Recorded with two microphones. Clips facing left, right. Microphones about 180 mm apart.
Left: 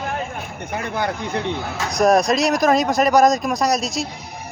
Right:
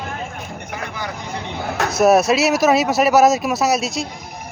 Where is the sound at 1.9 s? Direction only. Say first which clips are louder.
Right 2 dB; 5° right (ahead or behind).